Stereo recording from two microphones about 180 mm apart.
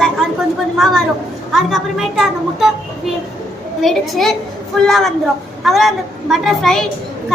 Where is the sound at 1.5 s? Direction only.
Centre (ahead or behind).